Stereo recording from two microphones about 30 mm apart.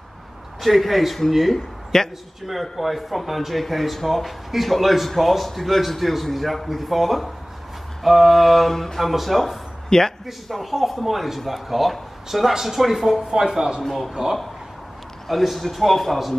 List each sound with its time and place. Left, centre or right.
0.6 s speech: centre
1.5 s speech: centre
2.4 s speech: centre
9.0 s speech: centre
9.8 s a sound: centre
10.5 s speech: centre
13.3 s a man's voice: centre
13.8 s speech: centre
15.2 s speech: centre